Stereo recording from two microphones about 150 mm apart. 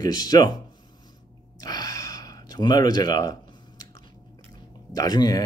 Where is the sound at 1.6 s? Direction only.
25° left (ahead or behind).